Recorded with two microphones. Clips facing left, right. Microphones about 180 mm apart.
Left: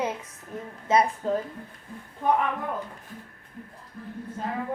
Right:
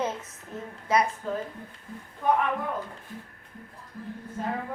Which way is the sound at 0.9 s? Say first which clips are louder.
Left 3 dB; 25° left (ahead or behind).